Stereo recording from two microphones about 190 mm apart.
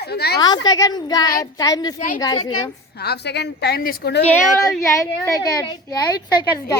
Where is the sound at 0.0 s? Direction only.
55° left (ahead or behind).